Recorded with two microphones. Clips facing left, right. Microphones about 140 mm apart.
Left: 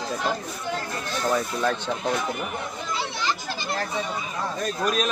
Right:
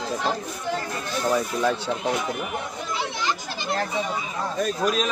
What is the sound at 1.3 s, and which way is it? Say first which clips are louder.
Speech: right 2 dB; 10° right (ahead or behind).